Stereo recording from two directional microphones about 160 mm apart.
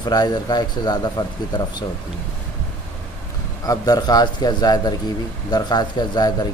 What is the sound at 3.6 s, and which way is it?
Speech, 25° left (ahead or behind).